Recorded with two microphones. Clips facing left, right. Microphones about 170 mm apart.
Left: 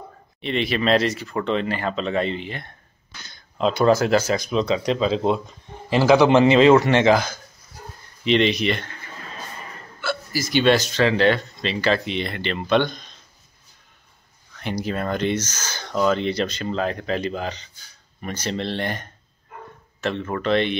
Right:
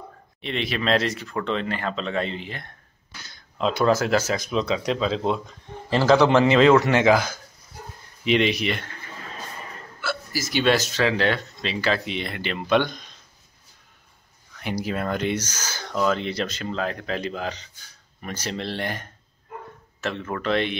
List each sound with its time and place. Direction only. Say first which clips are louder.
0.4 s speech: left 4 dB; centre (ahead or behind)
6.3 s speech: left 2 dB; 25° left (ahead or behind)
6.8 s speech: left 1 dB; 5° right (ahead or behind)
9.9 s speech: left 3 dB; 5° right (ahead or behind)
14.6 s speech: left 1 dB; 10° right (ahead or behind)